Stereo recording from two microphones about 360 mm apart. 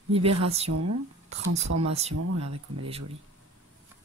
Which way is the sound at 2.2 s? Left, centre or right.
Right.